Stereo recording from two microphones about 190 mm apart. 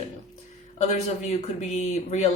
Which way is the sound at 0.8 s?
35° left (ahead or behind).